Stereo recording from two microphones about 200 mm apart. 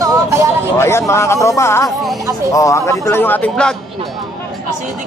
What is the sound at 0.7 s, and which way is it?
Speech, 15° left (ahead or behind).